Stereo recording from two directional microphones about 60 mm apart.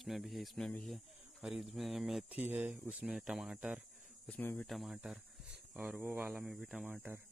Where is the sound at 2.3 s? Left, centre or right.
Right.